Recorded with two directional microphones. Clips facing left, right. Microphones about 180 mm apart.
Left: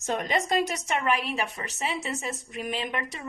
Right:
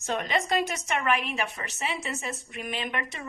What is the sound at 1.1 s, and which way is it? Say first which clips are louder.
A woman's voice: left 1 dB; 35° left (ahead or behind).